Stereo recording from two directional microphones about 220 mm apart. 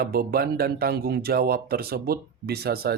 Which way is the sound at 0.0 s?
45° right (ahead or behind).